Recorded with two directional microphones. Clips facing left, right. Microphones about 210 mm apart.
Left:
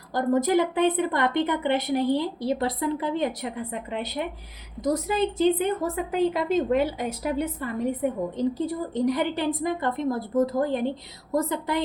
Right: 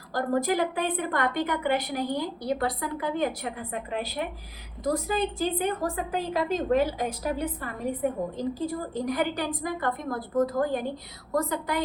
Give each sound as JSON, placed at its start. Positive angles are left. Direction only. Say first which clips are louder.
{"t": 0.1, "sound": "a woman's voice", "louder": "left 4 dB", "side_deg": 20}